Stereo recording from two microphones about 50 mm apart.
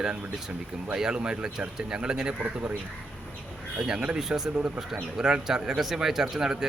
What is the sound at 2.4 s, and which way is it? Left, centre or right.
Speech, right.